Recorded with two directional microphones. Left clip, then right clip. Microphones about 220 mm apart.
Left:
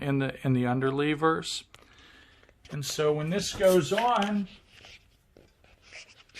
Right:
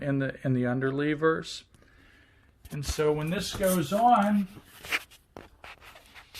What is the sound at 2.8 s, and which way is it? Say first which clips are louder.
Speech: even; 25° left (ahead or behind).